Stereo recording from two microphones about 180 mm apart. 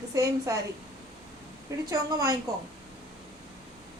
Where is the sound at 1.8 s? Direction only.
20° right (ahead or behind).